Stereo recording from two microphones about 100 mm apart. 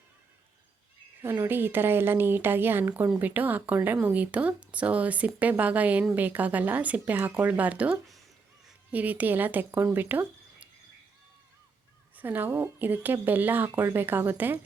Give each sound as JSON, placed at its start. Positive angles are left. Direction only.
{"t": 1.2, "sound": "speech", "side_deg": -25}
{"t": 12.1, "sound": "speech", "side_deg": -20}